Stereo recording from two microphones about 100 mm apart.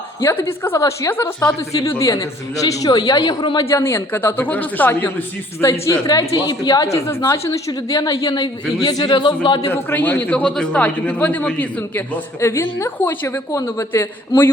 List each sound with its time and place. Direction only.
0.2 s a woman's voice: 25° left (ahead or behind)
3.4 s a man's voice: 50° left (ahead or behind)
3.7 s a woman's voice: 25° left (ahead or behind)
5.9 s a woman's voice: 35° left (ahead or behind)
9.6 s a man's voice: 20° left (ahead or behind)
11.8 s a woman's voice: 25° left (ahead or behind)